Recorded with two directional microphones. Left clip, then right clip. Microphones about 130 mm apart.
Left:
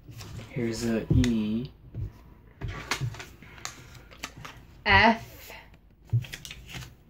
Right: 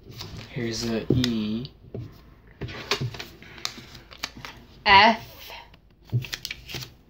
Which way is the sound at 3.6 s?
20° right (ahead or behind).